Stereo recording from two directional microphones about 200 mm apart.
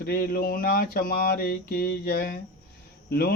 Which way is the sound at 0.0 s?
50° left (ahead or behind).